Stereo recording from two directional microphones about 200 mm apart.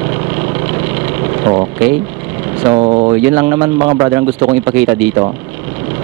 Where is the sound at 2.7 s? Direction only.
30° right (ahead or behind).